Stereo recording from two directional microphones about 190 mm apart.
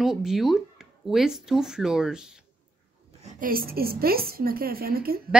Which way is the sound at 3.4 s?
50° right (ahead or behind).